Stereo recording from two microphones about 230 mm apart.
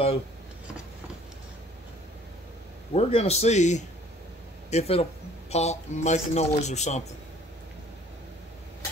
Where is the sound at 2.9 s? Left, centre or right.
Left.